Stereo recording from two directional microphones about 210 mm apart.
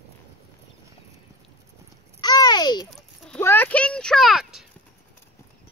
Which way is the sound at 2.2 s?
20° left (ahead or behind).